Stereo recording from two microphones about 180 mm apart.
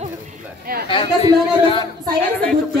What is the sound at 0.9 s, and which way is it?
Speech, 30° left (ahead or behind).